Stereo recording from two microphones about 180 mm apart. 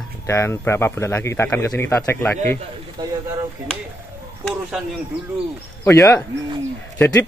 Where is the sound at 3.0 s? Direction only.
25° right (ahead or behind).